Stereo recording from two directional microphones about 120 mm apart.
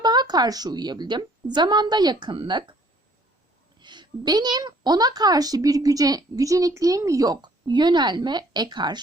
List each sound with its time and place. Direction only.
0.0 s a woman's voice: 35° right (ahead or behind)
3.8 s a woman's voice: 40° right (ahead or behind)